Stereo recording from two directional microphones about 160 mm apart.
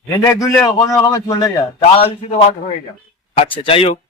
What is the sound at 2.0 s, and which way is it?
A man's voice, 40° left (ahead or behind).